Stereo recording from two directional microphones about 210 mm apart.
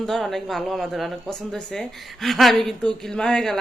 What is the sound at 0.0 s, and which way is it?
A woman's voice, centre (ahead or behind).